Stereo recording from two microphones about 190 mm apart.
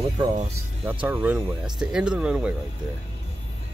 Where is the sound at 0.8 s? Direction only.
10° right (ahead or behind).